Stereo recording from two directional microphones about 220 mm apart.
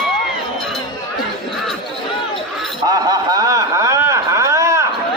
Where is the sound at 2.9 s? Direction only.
15° right (ahead or behind).